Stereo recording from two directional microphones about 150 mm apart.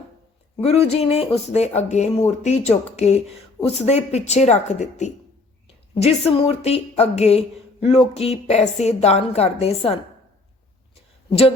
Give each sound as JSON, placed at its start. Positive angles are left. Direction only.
{"t": 0.5, "sound": "a woman's voice", "side_deg": 45}
{"t": 11.3, "sound": "speech", "side_deg": 40}